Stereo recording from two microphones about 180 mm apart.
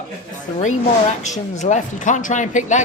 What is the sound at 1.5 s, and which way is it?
Speech, 40° left (ahead or behind).